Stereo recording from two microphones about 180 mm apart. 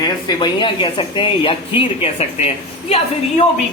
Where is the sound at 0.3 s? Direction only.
25° left (ahead or behind).